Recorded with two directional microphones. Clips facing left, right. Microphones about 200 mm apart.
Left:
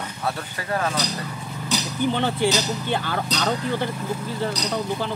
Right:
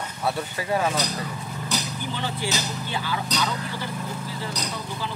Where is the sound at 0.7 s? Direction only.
15° right (ahead or behind).